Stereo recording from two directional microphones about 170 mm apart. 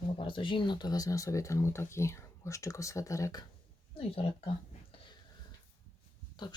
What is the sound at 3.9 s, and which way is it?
Speech, 35° left (ahead or behind).